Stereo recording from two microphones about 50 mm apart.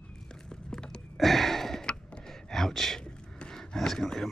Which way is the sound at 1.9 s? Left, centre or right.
Left.